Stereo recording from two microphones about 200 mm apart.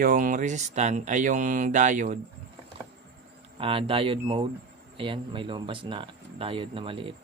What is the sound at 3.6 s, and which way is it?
Speech, 25° right (ahead or behind).